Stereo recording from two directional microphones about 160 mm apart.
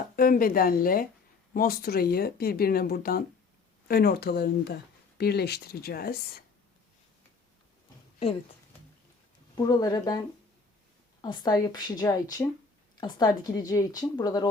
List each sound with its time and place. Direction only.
0.2 s speech: 65° left (ahead or behind); by 4.4 s 80° left
4.6 s speech: 90° left; by 6.4 s 70° left (ahead or behind)
9.6 s speech: 25° left (ahead or behind)
11.2 s speech: 25° left (ahead or behind)